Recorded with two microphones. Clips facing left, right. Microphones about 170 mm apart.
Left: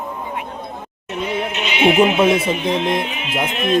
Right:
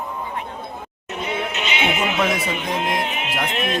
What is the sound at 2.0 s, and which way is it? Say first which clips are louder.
Speech: left 7 dB; 25° left (ahead or behind).